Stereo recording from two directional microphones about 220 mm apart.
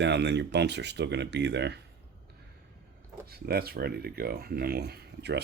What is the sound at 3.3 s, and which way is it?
Speech, 45° right (ahead or behind).